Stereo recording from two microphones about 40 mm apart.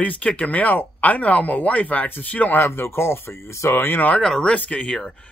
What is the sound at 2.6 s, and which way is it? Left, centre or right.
Speech, left.